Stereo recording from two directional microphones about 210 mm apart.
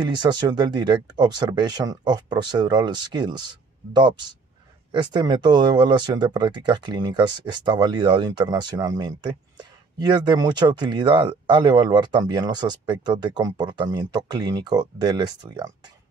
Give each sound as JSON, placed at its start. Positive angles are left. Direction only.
{"t": 0.0, "sound": "speech", "side_deg": -20}